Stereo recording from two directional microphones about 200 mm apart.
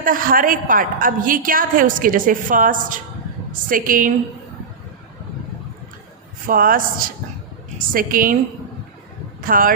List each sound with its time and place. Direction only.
0.0 s a woman's voice: 45° right (ahead or behind)
6.5 s a woman's voice: 45° right (ahead or behind)
9.4 s speech: 45° right (ahead or behind)